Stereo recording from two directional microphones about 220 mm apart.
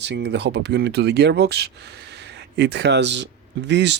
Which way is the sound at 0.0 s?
50° right (ahead or behind).